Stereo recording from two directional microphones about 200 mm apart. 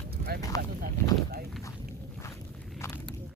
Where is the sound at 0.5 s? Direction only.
15° left (ahead or behind).